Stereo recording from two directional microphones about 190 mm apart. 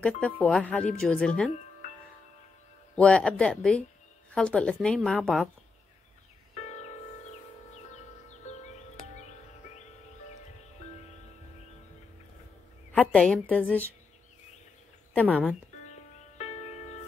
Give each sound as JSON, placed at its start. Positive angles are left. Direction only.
{"t": 0.0, "sound": "speech", "side_deg": 5}
{"t": 3.0, "sound": "speech", "side_deg": 5}
{"t": 6.5, "sound": "music", "side_deg": 35}
{"t": 12.9, "sound": "a woman's voice", "side_deg": 5}
{"t": 15.1, "sound": "a woman's voice", "side_deg": 10}
{"t": 15.9, "sound": "music", "side_deg": 35}